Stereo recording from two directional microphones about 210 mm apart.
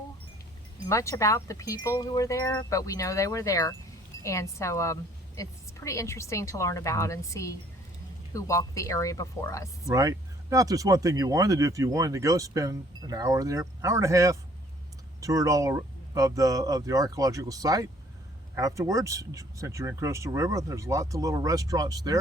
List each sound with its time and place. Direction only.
0.9 s speech: 15° left (ahead or behind)
9.9 s speech: 15° right (ahead or behind)